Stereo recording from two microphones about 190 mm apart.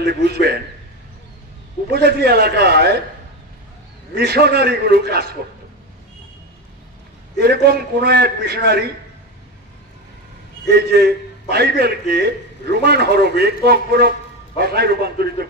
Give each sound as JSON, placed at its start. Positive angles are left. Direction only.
{"t": 0.0, "sound": "a man's voice", "side_deg": -55}
{"t": 1.9, "sound": "a man's voice", "side_deg": -55}
{"t": 4.1, "sound": "a man's voice", "side_deg": -55}
{"t": 7.3, "sound": "a man's voice", "side_deg": -55}
{"t": 10.7, "sound": "a man's voice", "side_deg": -55}